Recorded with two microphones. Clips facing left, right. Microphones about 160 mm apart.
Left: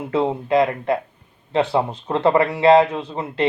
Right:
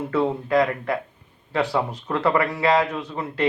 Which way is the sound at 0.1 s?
25° left (ahead or behind).